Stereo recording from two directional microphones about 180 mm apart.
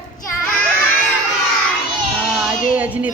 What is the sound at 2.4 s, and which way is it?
Child singing, 10° right (ahead or behind).